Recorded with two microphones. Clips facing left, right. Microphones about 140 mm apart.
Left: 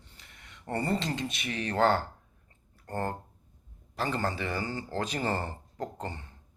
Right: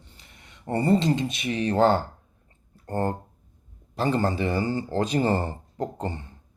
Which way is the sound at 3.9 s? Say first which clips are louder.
Right 7 dB; 25° right (ahead or behind).